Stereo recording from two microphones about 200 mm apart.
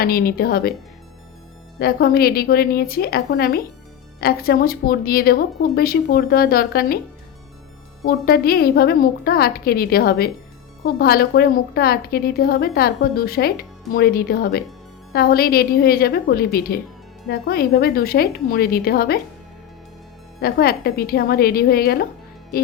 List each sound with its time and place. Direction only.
0.0 s a woman's voice: 50° left (ahead or behind)
1.8 s a woman's voice: 50° left (ahead or behind)
8.0 s a woman's voice: 50° left (ahead or behind)
20.4 s a woman's voice: 50° left (ahead or behind)